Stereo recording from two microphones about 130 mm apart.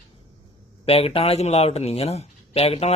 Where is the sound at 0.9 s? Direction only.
50° left (ahead or behind).